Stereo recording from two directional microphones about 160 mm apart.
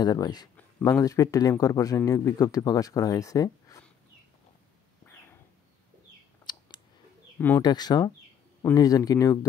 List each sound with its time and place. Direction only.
0.0 s speech: 25° left (ahead or behind)
5.0 s a sound: 15° left (ahead or behind)
6.5 s clicking: 30° left (ahead or behind)
7.3 s speech: 10° left (ahead or behind)
7.6 s speech: 25° left (ahead or behind)